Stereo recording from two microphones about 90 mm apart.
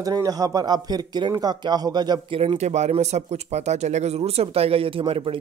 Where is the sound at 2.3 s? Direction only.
85° right.